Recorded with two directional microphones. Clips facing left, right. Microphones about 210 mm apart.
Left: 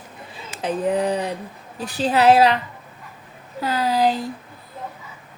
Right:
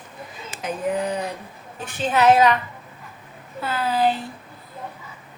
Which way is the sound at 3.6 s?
40° left (ahead or behind).